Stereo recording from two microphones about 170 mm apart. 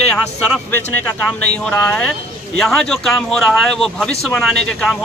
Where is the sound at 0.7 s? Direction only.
10° left (ahead or behind).